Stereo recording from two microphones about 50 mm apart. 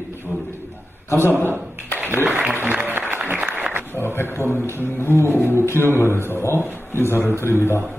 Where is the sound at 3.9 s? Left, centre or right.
Left.